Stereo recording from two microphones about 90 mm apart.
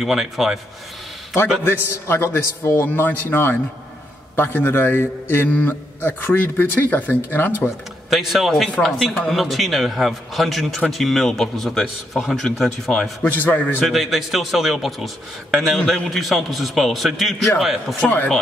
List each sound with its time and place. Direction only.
0.0 s a man's voice: 5° right (ahead or behind)
1.6 s a man's voice: 25° left (ahead or behind)
8.1 s a man's voice: 5° right (ahead or behind)
13.2 s a man's voice: 20° left (ahead or behind)
13.7 s a man's voice: centre (ahead or behind)
18.0 s a man's voice: 20° left (ahead or behind)